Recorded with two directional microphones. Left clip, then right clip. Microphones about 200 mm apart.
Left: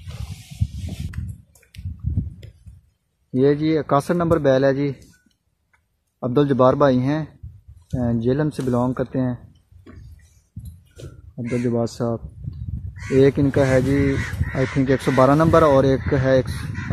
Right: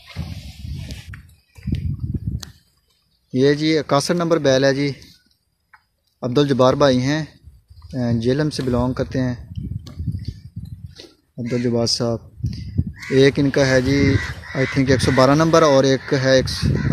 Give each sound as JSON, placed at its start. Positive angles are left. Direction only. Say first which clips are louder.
{"t": 3.3, "sound": "speech", "louder": "right 1 dB", "side_deg": -10}
{"t": 6.1, "sound": "speech", "louder": "right 1 dB", "side_deg": -5}
{"t": 11.4, "sound": "speech", "louder": "right 3 dB", "side_deg": -25}